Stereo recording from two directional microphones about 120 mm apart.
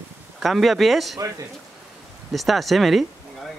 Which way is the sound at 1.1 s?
25° right (ahead or behind).